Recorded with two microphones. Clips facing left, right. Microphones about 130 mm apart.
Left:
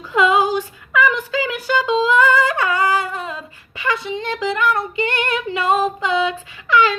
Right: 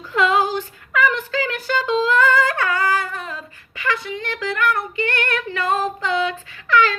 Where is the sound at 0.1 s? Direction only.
15° left (ahead or behind).